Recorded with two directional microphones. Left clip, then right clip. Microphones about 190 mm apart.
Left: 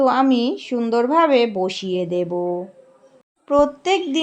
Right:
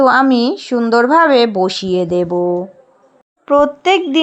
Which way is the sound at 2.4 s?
35° right (ahead or behind).